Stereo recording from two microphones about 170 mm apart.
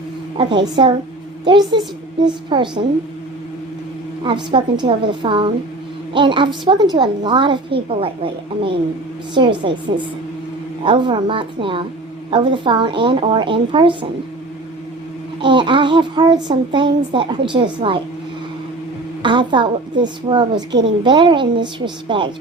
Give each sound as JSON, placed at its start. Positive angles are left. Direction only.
{"t": 0.3, "sound": "a woman's voice", "side_deg": -30}
{"t": 4.5, "sound": "a woman's voice", "side_deg": -30}
{"t": 10.8, "sound": "a woman's voice", "side_deg": -30}
{"t": 15.4, "sound": "a woman's voice", "side_deg": -30}
{"t": 19.2, "sound": "a woman's voice", "side_deg": -30}